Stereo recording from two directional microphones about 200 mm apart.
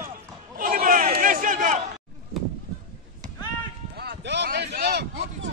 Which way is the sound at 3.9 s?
55° right (ahead or behind).